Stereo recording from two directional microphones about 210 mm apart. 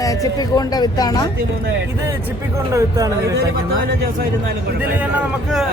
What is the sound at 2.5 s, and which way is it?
Speech, 15° right (ahead or behind).